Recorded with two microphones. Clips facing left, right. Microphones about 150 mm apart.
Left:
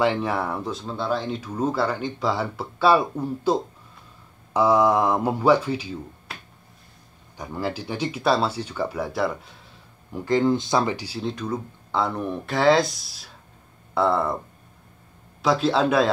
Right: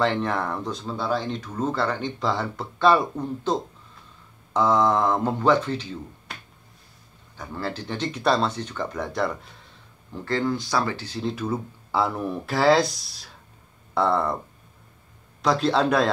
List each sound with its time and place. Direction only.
0.0 s speech: 10° left (ahead or behind)
4.6 s speech: 10° left (ahead or behind)
7.3 s speech: 15° left (ahead or behind)
10.1 s speech: 15° left (ahead or behind)
11.1 s speech: centre (ahead or behind)
15.4 s speech: centre (ahead or behind)